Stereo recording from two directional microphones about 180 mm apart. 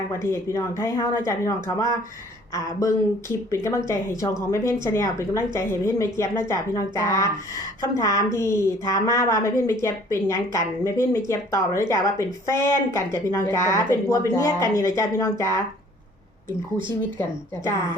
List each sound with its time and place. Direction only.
0.5 s a woman's voice: 15° left (ahead or behind)